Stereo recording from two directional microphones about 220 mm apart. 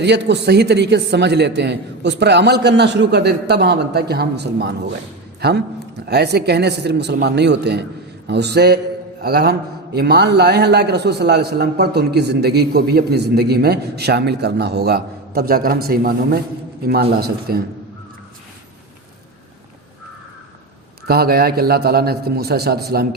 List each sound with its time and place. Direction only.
0.0 s a man's voice: 50° right (ahead or behind)
21.1 s a man's voice: 45° right (ahead or behind)